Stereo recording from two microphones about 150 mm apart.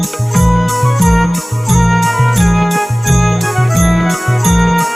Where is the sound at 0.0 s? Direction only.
Centre (ahead or behind).